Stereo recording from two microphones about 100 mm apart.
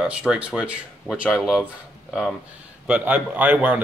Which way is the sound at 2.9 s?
15° right (ahead or behind).